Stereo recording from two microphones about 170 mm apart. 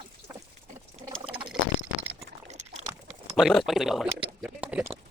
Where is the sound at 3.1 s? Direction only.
Centre (ahead or behind).